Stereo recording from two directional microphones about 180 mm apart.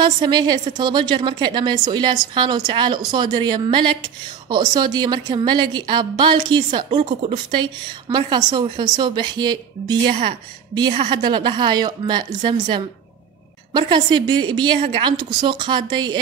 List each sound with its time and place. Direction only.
0.0 s a woman's voice: 25° right (ahead or behind)